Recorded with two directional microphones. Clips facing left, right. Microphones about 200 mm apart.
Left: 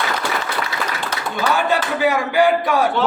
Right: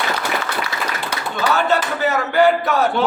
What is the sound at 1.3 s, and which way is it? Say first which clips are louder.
A man's voice: right 1 dB; 15° left (ahead or behind).